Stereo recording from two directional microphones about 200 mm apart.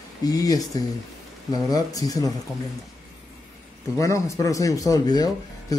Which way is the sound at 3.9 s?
15° left (ahead or behind).